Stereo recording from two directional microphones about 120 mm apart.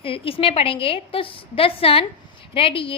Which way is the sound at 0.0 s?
50° left (ahead or behind).